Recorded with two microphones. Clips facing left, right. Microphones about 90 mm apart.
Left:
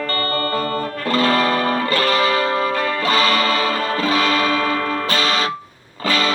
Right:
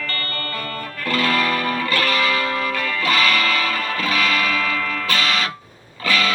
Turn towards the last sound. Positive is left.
turn(degrees=35)  # may be behind; listen again after turning